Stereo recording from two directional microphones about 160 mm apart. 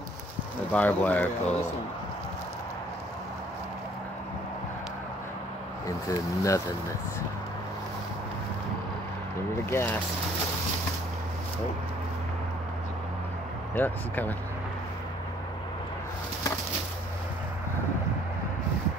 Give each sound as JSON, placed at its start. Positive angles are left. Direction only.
{"t": 0.7, "sound": "speech", "side_deg": 10}
{"t": 5.9, "sound": "speech", "side_deg": 20}
{"t": 9.7, "sound": "speech", "side_deg": 15}
{"t": 13.7, "sound": "speech", "side_deg": 10}